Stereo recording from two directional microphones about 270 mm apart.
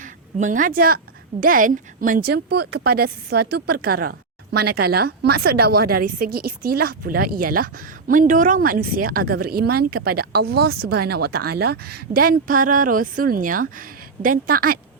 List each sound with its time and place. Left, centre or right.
0.0 s a woman's voice: right